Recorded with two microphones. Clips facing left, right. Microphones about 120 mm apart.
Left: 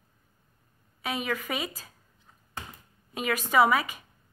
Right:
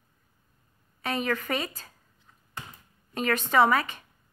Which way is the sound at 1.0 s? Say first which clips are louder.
Right 2 dB; 5° left (ahead or behind).